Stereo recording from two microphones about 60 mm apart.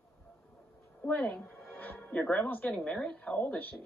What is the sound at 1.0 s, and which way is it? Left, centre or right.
Speech, left.